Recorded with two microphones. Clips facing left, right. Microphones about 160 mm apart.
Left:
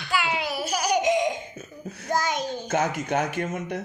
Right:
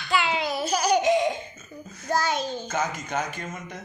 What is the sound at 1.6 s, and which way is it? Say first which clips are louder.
Cough: left 4 dB; 65° left (ahead or behind).